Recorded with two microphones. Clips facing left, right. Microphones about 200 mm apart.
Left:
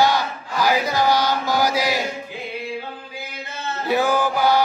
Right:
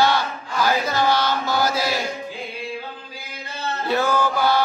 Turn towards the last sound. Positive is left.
turn(degrees=15)  # may be behind; listen again after turning